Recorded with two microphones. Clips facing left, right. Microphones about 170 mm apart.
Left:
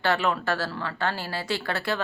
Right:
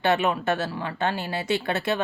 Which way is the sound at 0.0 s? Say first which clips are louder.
Right 2 dB; 20° right (ahead or behind).